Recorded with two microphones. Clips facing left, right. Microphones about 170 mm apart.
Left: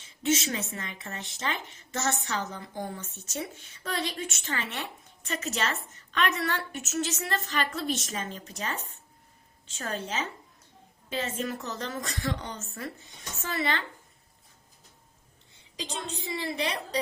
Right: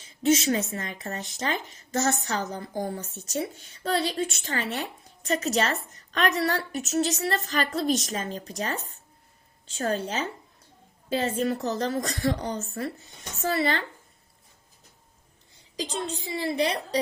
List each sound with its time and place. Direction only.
0.0 s speech: 40° right (ahead or behind)
15.7 s speech: 35° right (ahead or behind)